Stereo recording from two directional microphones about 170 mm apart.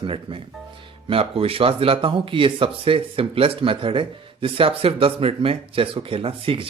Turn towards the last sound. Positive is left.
turn(degrees=-30)  # may be behind; listen again after turning